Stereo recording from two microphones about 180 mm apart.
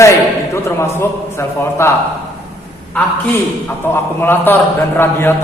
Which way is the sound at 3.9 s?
10° left (ahead or behind).